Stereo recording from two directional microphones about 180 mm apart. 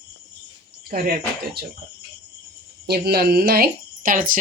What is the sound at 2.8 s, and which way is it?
Speech, 60° right (ahead or behind).